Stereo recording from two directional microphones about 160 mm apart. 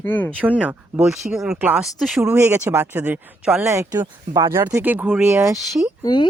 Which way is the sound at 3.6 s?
20° right (ahead or behind).